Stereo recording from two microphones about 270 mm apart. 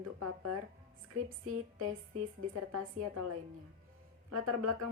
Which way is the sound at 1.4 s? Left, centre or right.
Right.